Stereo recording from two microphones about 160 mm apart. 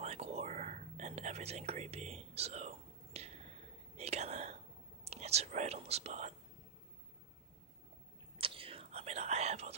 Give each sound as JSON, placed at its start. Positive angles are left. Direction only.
{"t": 0.0, "sound": "whispering", "side_deg": -40}
{"t": 8.4, "sound": "whispering", "side_deg": -35}